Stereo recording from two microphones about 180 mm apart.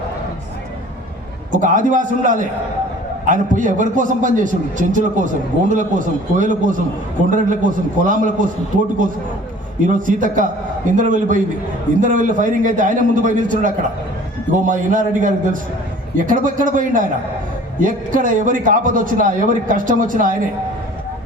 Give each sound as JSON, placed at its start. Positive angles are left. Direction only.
{"t": 1.5, "sound": "a man's voice", "side_deg": -45}
{"t": 9.8, "sound": "a man's voice", "side_deg": -45}